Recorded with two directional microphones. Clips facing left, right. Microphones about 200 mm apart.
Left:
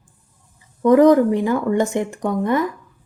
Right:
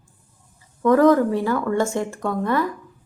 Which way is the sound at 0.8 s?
15° left (ahead or behind).